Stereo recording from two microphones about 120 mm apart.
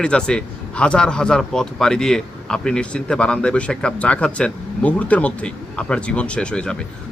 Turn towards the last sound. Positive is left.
turn(degrees=10)  # may be behind; listen again after turning